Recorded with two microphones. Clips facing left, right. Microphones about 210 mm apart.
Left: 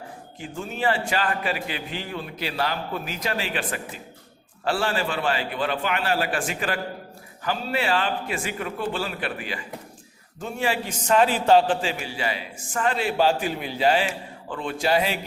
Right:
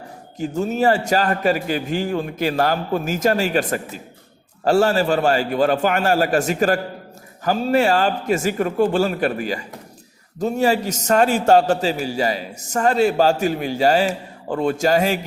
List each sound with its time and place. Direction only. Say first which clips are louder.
0.3 s a man's voice: right 11 dB; 40° right (ahead or behind)